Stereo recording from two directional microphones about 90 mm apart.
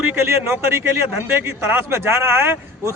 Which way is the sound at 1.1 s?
25° right (ahead or behind).